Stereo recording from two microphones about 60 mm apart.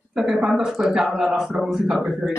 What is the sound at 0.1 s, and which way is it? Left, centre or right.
Speech, centre.